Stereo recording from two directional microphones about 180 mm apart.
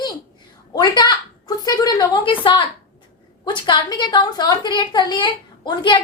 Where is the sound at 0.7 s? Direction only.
20° left (ahead or behind).